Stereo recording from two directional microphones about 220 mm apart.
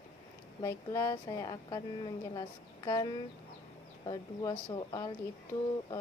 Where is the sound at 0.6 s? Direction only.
15° left (ahead or behind).